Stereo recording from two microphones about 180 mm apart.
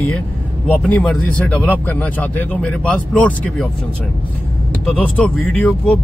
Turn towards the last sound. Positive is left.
turn(degrees=5)  # may be behind; listen again after turning